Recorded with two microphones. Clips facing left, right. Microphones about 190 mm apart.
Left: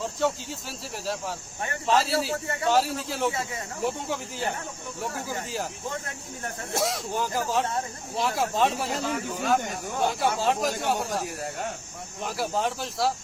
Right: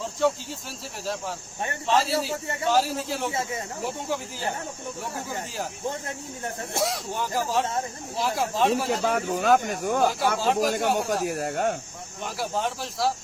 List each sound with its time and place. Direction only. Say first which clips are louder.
0.0 s speech: right 2 dB; centre (ahead or behind)
1.9 s speech: even; centre (ahead or behind)
6.7 s speech: left 1 dB; centre (ahead or behind)
9.0 s speech: right 4 dB; 60° right (ahead or behind)
10.3 s speech: right 2 dB; centre (ahead or behind)
11.3 s speech: right 7 dB; 55° right (ahead or behind)
12.2 s speech: left 1 dB; centre (ahead or behind)